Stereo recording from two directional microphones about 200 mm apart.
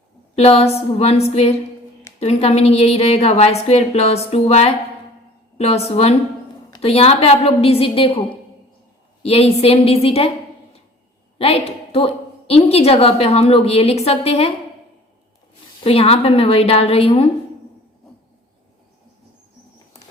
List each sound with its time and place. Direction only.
0.3 s a woman's voice: 30° left (ahead or behind)
11.3 s a woman's voice: 30° left (ahead or behind)
15.8 s a woman's voice: 30° left (ahead or behind)